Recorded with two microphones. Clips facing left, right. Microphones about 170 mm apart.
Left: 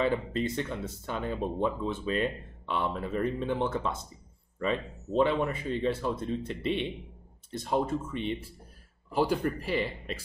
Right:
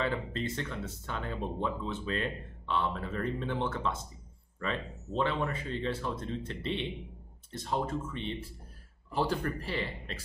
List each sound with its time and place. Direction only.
0.0 s speech: 15° left (ahead or behind)